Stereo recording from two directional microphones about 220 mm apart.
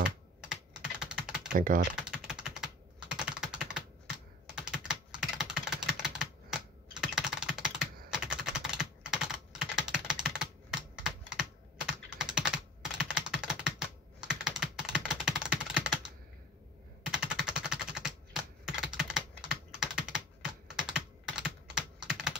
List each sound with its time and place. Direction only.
0.5 s typing: 5° right (ahead or behind)
1.5 s speech: 40° right (ahead or behind)
2.0 s typing: 5° right (ahead or behind)
12.2 s computer keyboard: 5° right (ahead or behind)
17.1 s typing: 5° right (ahead or behind)
20.7 s computer keyboard: 5° right (ahead or behind)